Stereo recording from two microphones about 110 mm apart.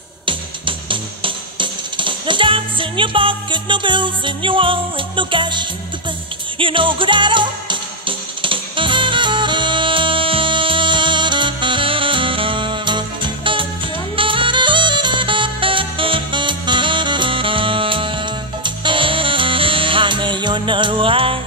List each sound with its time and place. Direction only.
0.2 s music: 50° right (ahead or behind)